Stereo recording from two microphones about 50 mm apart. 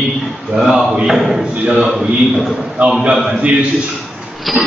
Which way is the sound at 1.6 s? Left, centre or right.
Centre.